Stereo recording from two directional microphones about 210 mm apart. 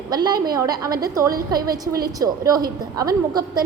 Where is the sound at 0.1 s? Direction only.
20° right (ahead or behind).